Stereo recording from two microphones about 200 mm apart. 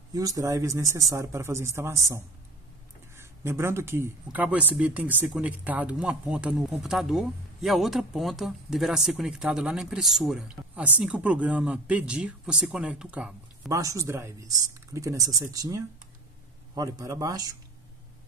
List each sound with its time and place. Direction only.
0.1 s speech: 15° right (ahead or behind)
13.7 s speech: 15° right (ahead or behind)